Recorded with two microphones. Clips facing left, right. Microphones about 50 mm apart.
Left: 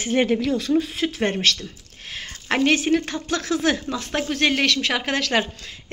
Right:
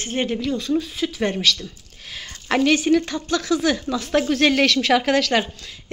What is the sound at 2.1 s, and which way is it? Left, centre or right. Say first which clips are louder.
Speech: right 2 dB; left.